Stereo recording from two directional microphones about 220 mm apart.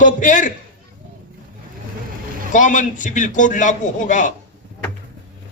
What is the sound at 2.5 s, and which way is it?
A man's voice, 35° left (ahead or behind).